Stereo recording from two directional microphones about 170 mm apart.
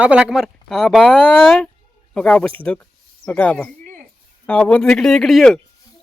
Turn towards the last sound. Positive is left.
turn(degrees=0)  # may be behind; listen again after turning